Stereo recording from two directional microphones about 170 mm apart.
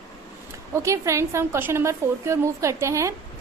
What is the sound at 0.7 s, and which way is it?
A woman's voice, 15° right (ahead or behind).